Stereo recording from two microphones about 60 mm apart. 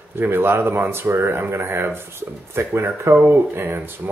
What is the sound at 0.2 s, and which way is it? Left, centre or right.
Speech, right.